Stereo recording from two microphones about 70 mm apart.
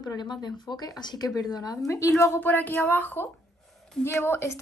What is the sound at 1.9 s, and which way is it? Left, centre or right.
Speech, left.